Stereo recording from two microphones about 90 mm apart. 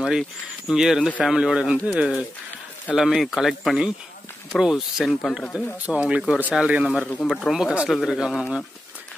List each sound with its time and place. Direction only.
0.0 s speech: 5° right (ahead or behind)